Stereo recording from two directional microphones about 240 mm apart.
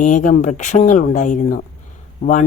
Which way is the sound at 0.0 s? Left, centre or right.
Left.